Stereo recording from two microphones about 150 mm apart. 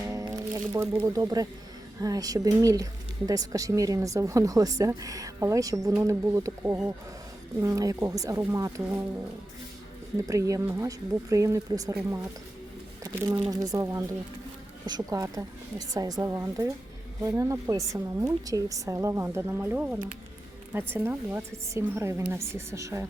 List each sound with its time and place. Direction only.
0.1 s music: 20° right (ahead or behind)
1.0 s speech: 25° right (ahead or behind)
10.2 s speech: 20° right (ahead or behind)
13.0 s a woman's voice: 25° right (ahead or behind)